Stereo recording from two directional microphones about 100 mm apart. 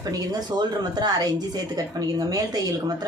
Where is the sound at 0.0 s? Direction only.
40° right (ahead or behind).